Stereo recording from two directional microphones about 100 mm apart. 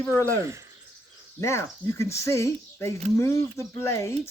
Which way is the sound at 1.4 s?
30° left (ahead or behind).